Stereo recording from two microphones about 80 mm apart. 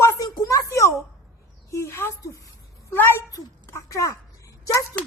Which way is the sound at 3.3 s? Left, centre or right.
Left.